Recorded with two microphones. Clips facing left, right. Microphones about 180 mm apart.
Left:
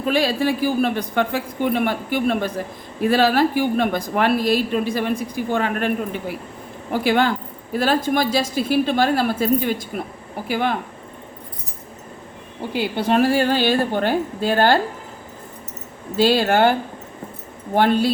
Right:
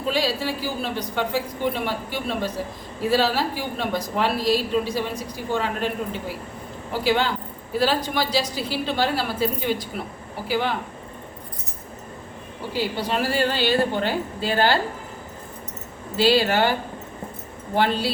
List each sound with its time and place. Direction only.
0.1 s a woman's voice: 55° left (ahead or behind)
13.1 s a woman's voice: 50° left (ahead or behind)
16.1 s a woman's voice: 50° left (ahead or behind)
17.7 s a woman's voice: 50° left (ahead or behind)